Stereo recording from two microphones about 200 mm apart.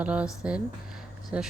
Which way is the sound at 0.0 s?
5° right (ahead or behind).